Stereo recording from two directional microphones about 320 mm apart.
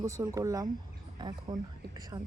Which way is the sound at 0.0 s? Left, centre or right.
Centre.